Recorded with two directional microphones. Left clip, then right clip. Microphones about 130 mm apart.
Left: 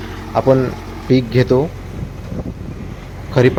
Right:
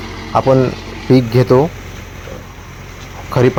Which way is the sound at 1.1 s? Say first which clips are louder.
Right 3 dB; 30° right (ahead or behind).